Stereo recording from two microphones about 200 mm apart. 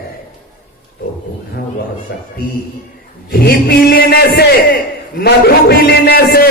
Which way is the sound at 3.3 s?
50° left (ahead or behind).